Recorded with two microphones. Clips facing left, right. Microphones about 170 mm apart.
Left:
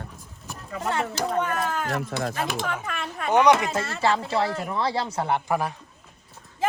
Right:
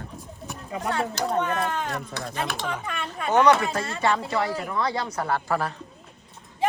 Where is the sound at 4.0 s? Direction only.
30° left (ahead or behind); by 5.8 s 15° left (ahead or behind).